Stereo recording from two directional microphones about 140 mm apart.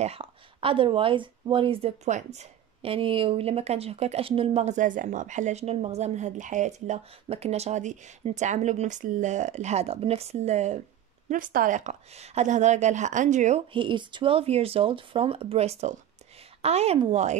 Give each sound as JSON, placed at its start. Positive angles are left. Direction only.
{"t": 0.0, "sound": "speech", "side_deg": -45}
{"t": 2.8, "sound": "speech", "side_deg": -40}
{"t": 11.2, "sound": "a woman's voice", "side_deg": -75}
{"t": 13.7, "sound": "speech", "side_deg": -35}